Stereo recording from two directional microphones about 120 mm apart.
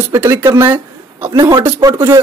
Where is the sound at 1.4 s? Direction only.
35° right (ahead or behind).